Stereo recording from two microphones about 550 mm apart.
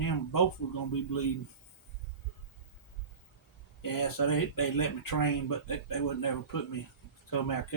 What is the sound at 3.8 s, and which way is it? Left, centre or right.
Speech, left.